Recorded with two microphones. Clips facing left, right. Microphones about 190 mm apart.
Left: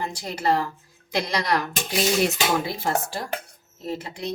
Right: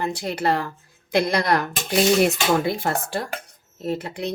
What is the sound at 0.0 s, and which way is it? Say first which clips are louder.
Speech: right 3 dB; 60° right (ahead or behind).